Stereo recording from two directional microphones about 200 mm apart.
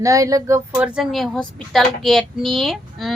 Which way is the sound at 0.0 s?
15° right (ahead or behind).